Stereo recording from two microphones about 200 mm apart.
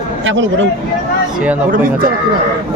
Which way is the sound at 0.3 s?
65° right (ahead or behind).